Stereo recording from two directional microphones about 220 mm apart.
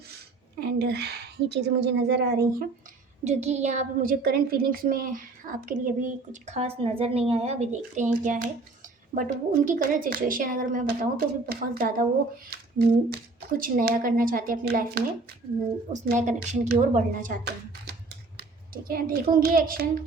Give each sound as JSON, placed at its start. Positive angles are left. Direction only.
{"t": 0.6, "sound": "a woman's voice", "side_deg": -45}
{"t": 3.2, "sound": "a woman's voice", "side_deg": -30}
{"t": 18.3, "sound": "a sound", "side_deg": -40}
{"t": 19.3, "sound": "a woman's voice", "side_deg": -40}